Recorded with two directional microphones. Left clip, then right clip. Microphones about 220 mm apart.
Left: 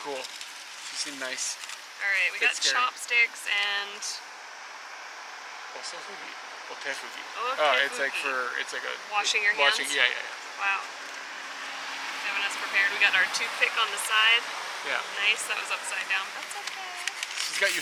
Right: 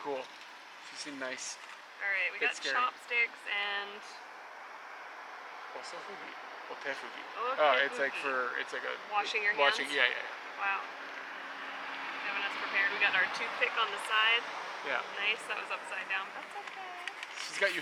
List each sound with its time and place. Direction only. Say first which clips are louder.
0.9 s speech: left 6 dB; 5° right (ahead or behind)
6.8 s speech: left 5 dB; 5° right (ahead or behind)